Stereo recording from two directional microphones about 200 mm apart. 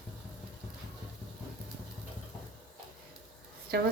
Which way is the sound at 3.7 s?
55° right (ahead or behind).